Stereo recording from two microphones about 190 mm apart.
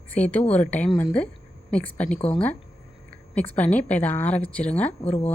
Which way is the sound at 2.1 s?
30° left (ahead or behind).